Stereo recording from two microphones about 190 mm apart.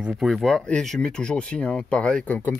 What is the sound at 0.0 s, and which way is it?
Speech, centre (ahead or behind).